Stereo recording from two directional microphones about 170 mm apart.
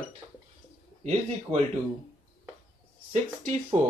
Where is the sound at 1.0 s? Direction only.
35° right (ahead or behind).